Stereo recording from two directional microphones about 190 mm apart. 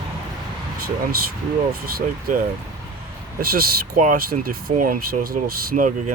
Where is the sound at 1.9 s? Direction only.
50° right (ahead or behind).